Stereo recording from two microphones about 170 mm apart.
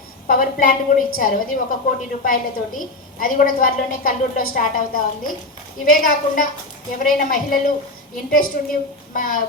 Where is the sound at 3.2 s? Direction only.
55° left (ahead or behind).